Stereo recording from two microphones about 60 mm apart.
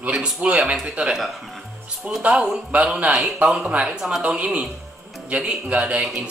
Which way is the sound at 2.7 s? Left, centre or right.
Right.